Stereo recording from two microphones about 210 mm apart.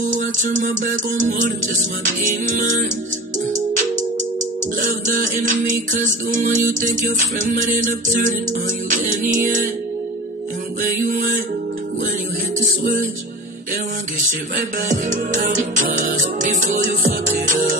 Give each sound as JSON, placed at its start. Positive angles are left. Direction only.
{"t": 0.1, "sound": "music", "side_deg": -35}
{"t": 2.0, "sound": "music", "side_deg": -35}
{"t": 10.8, "sound": "music", "side_deg": -40}
{"t": 14.9, "sound": "music", "side_deg": -35}